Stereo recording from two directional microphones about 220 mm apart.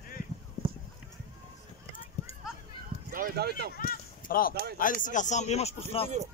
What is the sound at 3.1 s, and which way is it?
Speech, 40° right (ahead or behind).